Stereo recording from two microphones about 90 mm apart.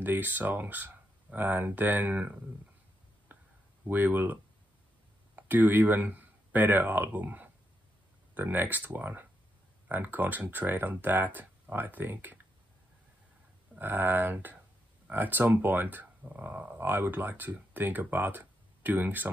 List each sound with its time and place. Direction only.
0.0 s speech: 20° right (ahead or behind)
3.3 s a sound: 20° right (ahead or behind)
3.9 s speech: 20° right (ahead or behind)
13.7 s speech: 20° right (ahead or behind)